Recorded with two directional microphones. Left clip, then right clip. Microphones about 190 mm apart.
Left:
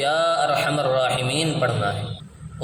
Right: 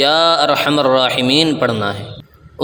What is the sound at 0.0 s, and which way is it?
A man's voice, 50° right (ahead or behind).